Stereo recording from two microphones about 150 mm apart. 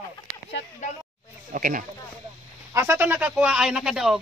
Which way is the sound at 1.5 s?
65° right (ahead or behind).